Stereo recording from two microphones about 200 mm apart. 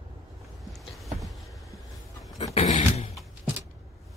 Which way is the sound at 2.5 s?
35° left (ahead or behind).